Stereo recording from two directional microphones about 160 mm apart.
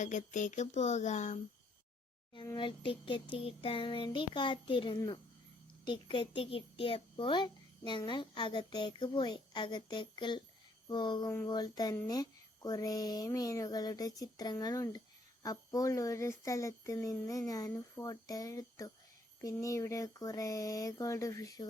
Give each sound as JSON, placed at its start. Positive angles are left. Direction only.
{"t": 0.0, "sound": "speech", "side_deg": 50}
{"t": 2.3, "sound": "a sound", "side_deg": 25}
{"t": 5.8, "sound": "a child's voice", "side_deg": 30}